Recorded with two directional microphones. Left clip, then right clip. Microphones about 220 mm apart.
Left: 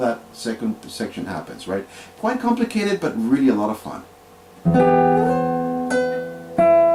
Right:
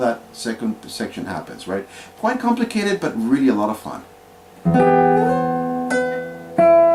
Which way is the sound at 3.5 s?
20° right (ahead or behind).